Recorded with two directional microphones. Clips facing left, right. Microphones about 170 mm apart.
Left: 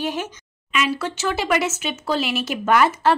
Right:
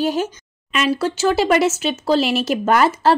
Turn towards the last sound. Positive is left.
turn(degrees=-35)  # may be behind; listen again after turning